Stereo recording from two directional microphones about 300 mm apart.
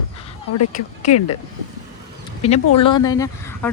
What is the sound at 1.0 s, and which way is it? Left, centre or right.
Speech, left.